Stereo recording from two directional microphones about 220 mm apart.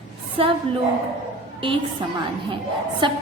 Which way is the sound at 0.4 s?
25° right (ahead or behind).